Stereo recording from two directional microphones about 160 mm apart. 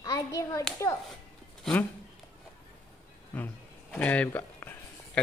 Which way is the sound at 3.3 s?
10° left (ahead or behind).